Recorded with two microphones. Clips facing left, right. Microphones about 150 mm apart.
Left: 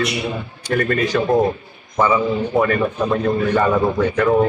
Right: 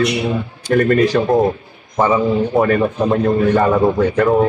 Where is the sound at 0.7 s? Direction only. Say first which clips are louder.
Right 5 dB; 35° right (ahead or behind).